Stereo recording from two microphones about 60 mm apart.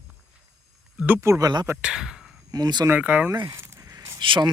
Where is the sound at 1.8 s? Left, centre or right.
Centre.